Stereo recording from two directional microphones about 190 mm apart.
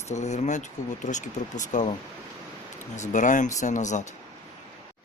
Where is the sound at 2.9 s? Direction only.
40° left (ahead or behind).